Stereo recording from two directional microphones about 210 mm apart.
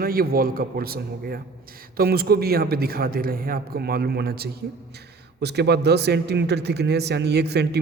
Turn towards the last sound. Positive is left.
turn(degrees=-50)  # may be behind; listen again after turning